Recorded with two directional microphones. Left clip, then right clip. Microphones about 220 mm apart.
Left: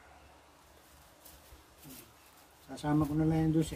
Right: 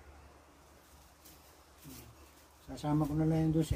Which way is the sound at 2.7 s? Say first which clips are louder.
Left 2 dB; 5° left (ahead or behind).